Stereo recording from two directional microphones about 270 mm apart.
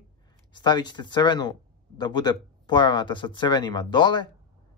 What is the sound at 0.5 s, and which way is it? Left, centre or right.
Speech, centre.